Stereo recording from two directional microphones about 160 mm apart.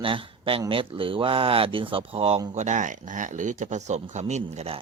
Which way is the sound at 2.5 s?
50° right (ahead or behind).